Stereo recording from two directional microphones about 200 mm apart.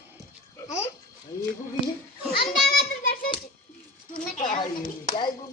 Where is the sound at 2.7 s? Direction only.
50° left (ahead or behind).